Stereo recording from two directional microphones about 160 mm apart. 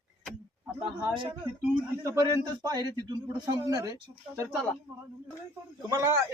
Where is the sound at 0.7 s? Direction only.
35° right (ahead or behind).